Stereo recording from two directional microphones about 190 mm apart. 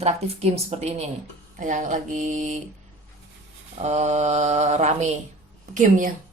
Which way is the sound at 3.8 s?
35° right (ahead or behind).